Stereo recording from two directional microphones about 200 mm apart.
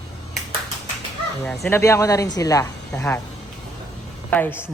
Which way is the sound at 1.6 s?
15° left (ahead or behind).